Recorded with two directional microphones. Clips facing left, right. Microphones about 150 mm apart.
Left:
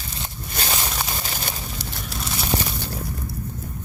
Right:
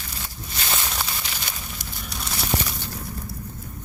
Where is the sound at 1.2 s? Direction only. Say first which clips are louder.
Left 4 dB; 40° left (ahead or behind).